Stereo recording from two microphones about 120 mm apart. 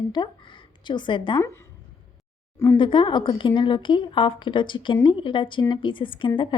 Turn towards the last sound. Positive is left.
turn(degrees=45)  # may be behind; listen again after turning